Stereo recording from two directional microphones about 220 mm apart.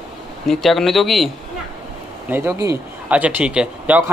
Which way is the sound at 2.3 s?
10° right (ahead or behind).